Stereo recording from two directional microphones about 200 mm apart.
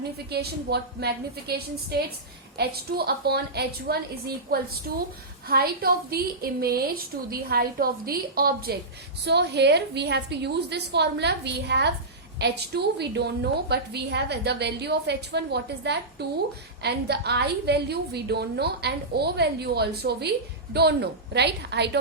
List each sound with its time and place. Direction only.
0.3 s a woman's voice: 55° right (ahead or behind)